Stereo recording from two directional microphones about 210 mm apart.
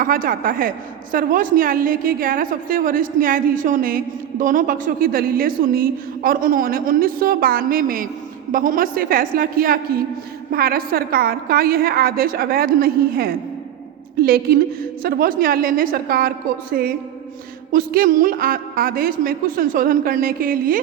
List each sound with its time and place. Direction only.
0.0 s a woman's voice: 40° right (ahead or behind)